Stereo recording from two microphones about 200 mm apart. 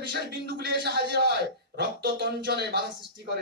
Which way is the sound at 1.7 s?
55° right (ahead or behind).